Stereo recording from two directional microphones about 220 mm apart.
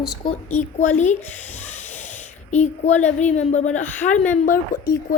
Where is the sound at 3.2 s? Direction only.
30° left (ahead or behind).